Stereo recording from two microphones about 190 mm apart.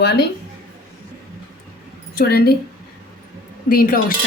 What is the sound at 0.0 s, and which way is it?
Speech, 60° left (ahead or behind).